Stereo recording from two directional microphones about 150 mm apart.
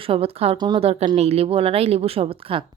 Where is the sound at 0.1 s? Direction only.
40° right (ahead or behind).